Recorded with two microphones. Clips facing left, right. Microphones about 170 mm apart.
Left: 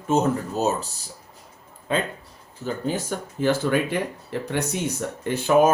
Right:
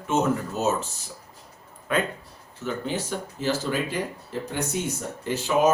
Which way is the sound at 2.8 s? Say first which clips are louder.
Left 2 dB; 45° left (ahead or behind).